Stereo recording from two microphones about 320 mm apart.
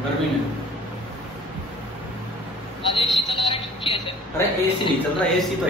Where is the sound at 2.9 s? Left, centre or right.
Centre.